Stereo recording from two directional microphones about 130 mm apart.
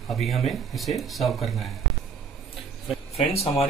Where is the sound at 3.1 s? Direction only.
50° left (ahead or behind).